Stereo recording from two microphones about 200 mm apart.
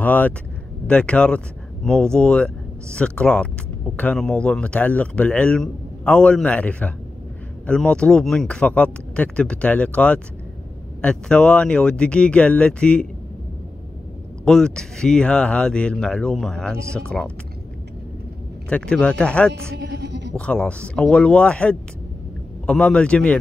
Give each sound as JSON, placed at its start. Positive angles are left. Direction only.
{"t": 0.0, "sound": "speech", "side_deg": 10}
{"t": 14.4, "sound": "speech", "side_deg": 5}
{"t": 18.7, "sound": "speech", "side_deg": 5}
{"t": 19.8, "sound": "music", "side_deg": -60}
{"t": 20.3, "sound": "speech", "side_deg": 5}